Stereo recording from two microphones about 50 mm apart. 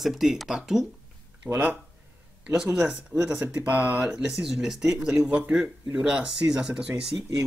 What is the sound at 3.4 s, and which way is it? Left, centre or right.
Speech, right.